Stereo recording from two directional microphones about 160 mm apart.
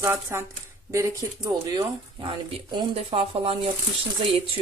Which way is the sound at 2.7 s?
35° right (ahead or behind).